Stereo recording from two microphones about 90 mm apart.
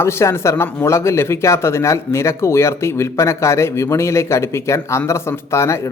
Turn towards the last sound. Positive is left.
turn(degrees=30)  # may be behind; listen again after turning